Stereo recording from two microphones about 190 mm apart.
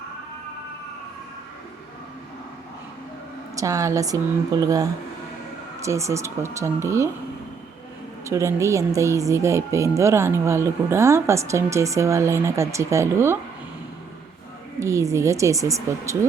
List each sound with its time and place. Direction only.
3.5 s speech: 15° right (ahead or behind)
8.2 s speech: 15° right (ahead or behind)
14.8 s speech: 15° right (ahead or behind)